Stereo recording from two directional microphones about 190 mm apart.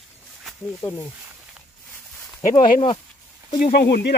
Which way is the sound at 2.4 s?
40° left (ahead or behind).